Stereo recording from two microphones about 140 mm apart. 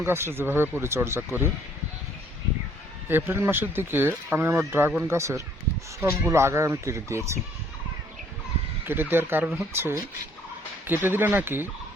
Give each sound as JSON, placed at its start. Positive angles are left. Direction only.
{"t": 0.0, "sound": "speech", "side_deg": -15}
{"t": 3.1, "sound": "speech", "side_deg": -15}
{"t": 8.8, "sound": "speech", "side_deg": -15}